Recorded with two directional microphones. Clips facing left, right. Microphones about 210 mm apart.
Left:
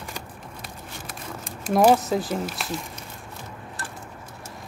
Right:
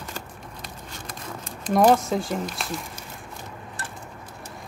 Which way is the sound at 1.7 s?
5° left (ahead or behind).